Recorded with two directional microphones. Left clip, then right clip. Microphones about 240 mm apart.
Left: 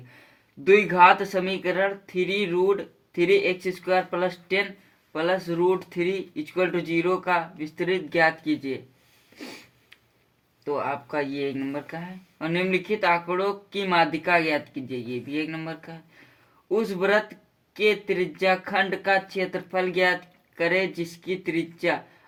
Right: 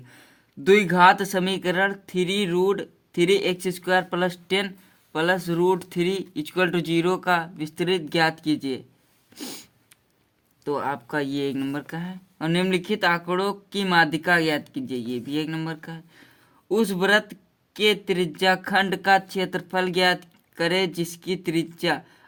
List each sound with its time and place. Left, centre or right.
0.7 s speech: right
10.6 s speech: right